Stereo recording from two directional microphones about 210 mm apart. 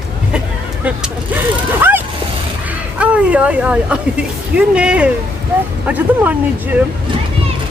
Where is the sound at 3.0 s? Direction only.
5° right (ahead or behind).